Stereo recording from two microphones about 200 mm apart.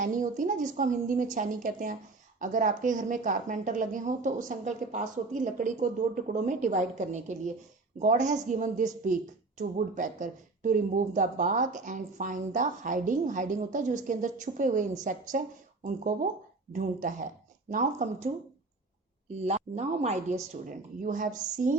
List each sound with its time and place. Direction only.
0.0 s speech: 40° right (ahead or behind)
19.3 s speech: 35° right (ahead or behind)